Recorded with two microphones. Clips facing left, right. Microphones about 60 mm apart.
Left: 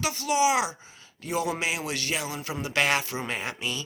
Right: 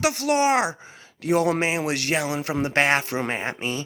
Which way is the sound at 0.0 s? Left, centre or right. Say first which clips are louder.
Right 4 dB; right.